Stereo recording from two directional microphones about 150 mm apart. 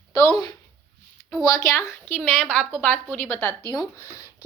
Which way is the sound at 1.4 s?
20° left (ahead or behind).